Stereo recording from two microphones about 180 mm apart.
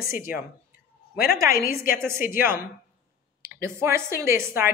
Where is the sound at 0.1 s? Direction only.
50° left (ahead or behind).